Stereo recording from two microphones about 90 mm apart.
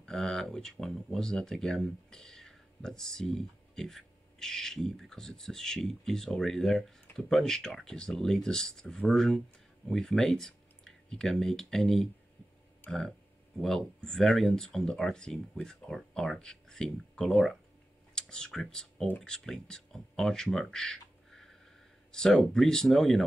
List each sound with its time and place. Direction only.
0.0 s speech: 5° left (ahead or behind)
12.8 s speech: 20° left (ahead or behind)
13.6 s speech: 5° left (ahead or behind)